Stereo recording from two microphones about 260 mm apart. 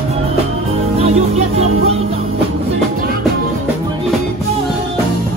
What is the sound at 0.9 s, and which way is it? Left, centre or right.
Music, right.